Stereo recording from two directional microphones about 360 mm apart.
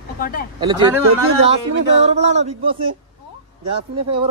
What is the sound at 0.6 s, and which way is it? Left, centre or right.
Speech, centre.